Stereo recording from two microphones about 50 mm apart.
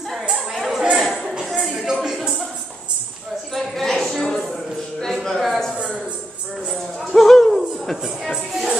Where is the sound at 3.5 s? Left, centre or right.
Centre.